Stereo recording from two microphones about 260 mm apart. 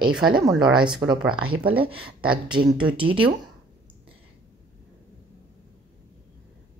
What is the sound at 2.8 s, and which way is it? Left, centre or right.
Speech, centre.